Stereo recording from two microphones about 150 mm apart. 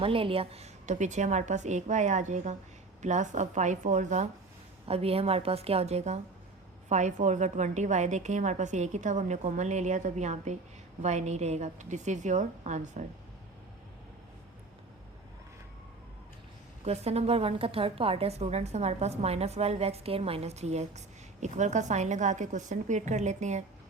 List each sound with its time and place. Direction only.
0.0 s a woman's voice: 35° right (ahead or behind); by 4.3 s 55° right (ahead or behind)
4.9 s a woman's voice: 40° right (ahead or behind)
16.8 s a woman's voice: 45° right (ahead or behind)